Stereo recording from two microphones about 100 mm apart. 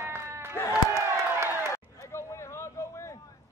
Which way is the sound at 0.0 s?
25° right (ahead or behind).